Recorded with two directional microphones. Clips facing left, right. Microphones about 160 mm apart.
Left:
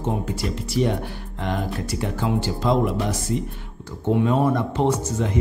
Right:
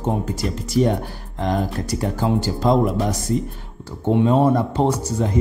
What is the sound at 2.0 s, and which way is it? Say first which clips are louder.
Speech: right 3 dB; 40° right (ahead or behind).